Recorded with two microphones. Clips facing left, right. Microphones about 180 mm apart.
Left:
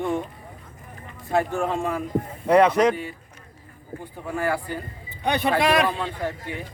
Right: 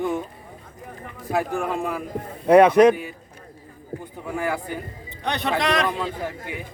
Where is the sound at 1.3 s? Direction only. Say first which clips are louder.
Left 1 dB; 10° right (ahead or behind).